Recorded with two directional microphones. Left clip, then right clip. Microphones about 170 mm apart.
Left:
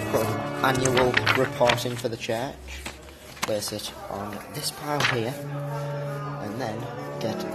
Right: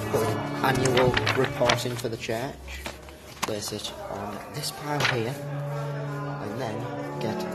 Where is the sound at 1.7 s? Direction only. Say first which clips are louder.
Left 1 dB; 25° left (ahead or behind).